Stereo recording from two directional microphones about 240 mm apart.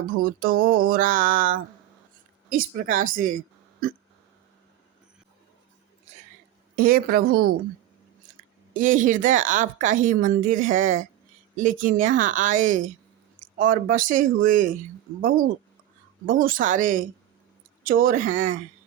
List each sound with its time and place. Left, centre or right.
0.1 s a woman's voice: right
6.7 s a woman's voice: right
8.7 s a woman's voice: right
16.2 s a woman's voice: right